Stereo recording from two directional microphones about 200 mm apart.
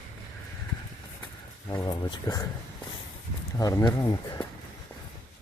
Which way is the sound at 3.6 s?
20° left (ahead or behind).